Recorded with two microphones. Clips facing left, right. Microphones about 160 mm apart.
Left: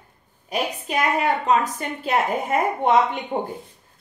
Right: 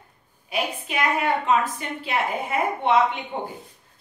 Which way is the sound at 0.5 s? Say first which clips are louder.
Left 2 dB; 40° left (ahead or behind).